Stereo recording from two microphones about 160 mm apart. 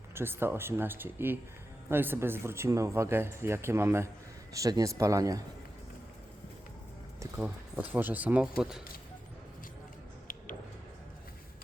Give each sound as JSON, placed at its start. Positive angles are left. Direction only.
{"t": 0.1, "sound": "a man's voice", "side_deg": -15}
{"t": 7.3, "sound": "speech", "side_deg": -10}